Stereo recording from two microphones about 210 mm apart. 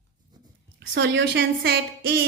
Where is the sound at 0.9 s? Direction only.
60° right (ahead or behind).